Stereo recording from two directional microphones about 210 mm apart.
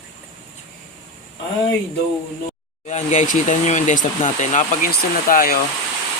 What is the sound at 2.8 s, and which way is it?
Speech, 35° left (ahead or behind).